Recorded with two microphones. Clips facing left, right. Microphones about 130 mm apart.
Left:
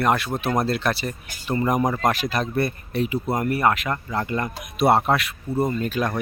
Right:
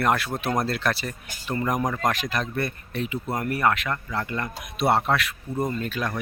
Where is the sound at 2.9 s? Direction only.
10° left (ahead or behind).